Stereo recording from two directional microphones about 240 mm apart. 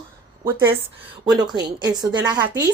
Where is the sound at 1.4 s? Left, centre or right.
Centre.